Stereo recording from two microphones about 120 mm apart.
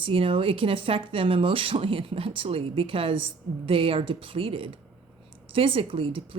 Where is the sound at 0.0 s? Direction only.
50° right (ahead or behind).